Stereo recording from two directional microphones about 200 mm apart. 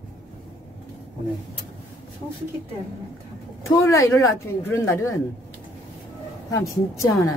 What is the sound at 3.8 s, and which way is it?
Speech, 15° left (ahead or behind).